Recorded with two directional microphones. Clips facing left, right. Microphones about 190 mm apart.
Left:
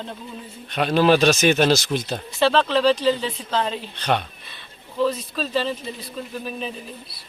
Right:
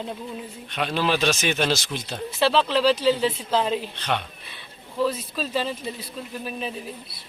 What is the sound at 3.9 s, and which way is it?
Speech, 40° left (ahead or behind).